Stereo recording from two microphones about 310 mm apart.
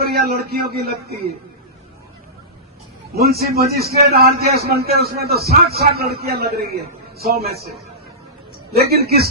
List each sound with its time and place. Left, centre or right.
0.0 s a man's voice: right
3.2 s a man's voice: right
8.7 s a man's voice: right